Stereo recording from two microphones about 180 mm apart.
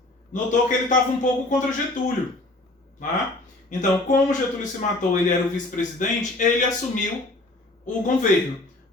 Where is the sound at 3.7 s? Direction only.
45° left (ahead or behind).